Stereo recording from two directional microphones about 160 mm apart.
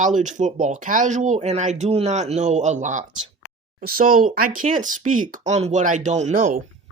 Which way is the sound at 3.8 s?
65° right (ahead or behind).